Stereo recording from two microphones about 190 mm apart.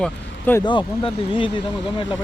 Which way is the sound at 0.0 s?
10° left (ahead or behind).